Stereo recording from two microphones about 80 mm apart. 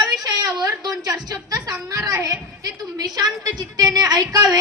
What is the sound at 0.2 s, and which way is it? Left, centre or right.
A woman's voice, right.